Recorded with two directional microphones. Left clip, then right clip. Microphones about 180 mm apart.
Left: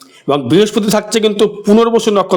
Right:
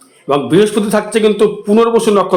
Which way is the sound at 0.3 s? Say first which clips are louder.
Even; 50° left (ahead or behind).